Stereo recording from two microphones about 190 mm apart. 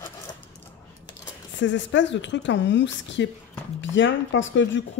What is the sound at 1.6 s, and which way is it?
Speech, 70° left (ahead or behind).